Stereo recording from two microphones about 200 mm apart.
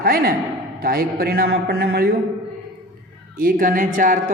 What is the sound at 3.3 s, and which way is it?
Speech, 45° right (ahead or behind).